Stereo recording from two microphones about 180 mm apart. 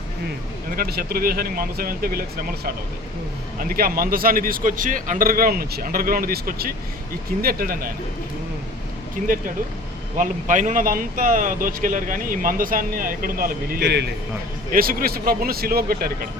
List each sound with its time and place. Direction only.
0.8 s speech: 55° right (ahead or behind)
3.6 s speech: 55° right (ahead or behind)
9.2 s speech: 45° right (ahead or behind); by 14.1 s 70° right (ahead or behind)
14.7 s speech: 55° right (ahead or behind)